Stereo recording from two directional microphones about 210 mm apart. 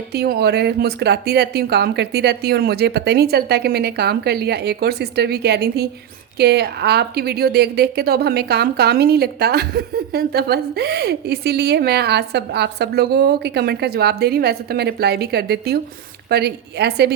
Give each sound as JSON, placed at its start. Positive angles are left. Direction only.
{"t": 0.1, "sound": "a woman's voice", "side_deg": -50}